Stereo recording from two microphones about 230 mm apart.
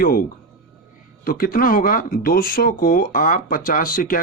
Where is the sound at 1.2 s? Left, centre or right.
Left.